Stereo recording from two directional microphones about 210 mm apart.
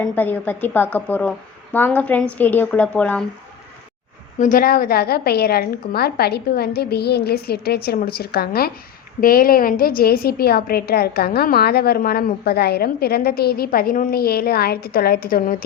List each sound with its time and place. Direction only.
0.0 s a woman's voice: 10° left (ahead or behind)
4.4 s a woman's voice: 40° left (ahead or behind)